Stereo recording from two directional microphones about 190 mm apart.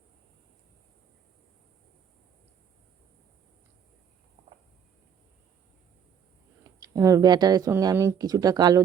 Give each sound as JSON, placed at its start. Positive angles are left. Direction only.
{"t": 6.8, "sound": "speech", "side_deg": -15}